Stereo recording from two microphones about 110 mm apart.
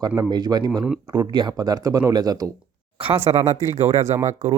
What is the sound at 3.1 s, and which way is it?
Speech, 60° right (ahead or behind).